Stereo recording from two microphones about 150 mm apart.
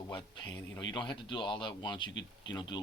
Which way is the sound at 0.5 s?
15° left (ahead or behind).